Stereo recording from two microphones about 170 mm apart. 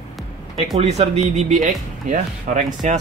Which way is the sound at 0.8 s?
40° right (ahead or behind).